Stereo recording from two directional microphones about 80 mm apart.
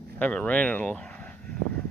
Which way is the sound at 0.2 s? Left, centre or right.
Centre.